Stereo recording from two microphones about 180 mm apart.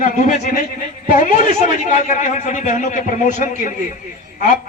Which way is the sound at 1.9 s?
45° left (ahead or behind).